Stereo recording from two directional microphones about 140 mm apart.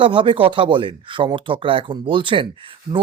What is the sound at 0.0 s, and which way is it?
Speech, 35° right (ahead or behind).